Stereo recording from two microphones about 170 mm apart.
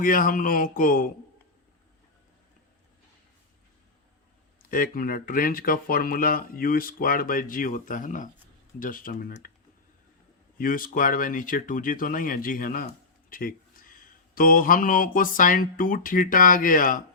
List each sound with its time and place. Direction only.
0.0 s speech: 55° left (ahead or behind)
4.7 s speech: 55° left (ahead or behind)
10.6 s speech: 55° left (ahead or behind)